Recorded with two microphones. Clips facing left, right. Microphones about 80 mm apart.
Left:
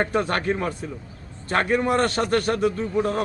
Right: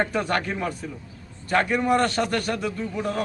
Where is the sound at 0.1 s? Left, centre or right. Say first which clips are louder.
Left 2 dB; left.